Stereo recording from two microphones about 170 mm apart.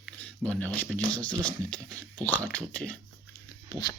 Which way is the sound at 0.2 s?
5° left (ahead or behind).